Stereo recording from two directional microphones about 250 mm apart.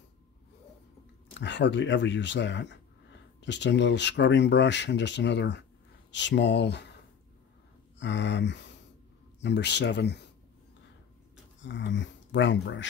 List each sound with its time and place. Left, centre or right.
1.3 s speech: left
8.0 s speech: left
11.6 s speech: left